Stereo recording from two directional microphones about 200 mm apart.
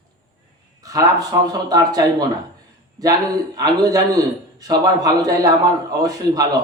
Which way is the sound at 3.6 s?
20° right (ahead or behind).